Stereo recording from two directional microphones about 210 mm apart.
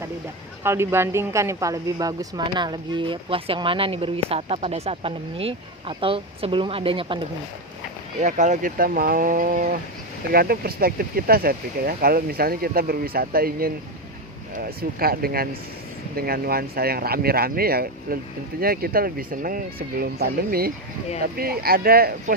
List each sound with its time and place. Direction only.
0.6 s speech: 10° right (ahead or behind)
8.2 s speech: 35° right (ahead or behind)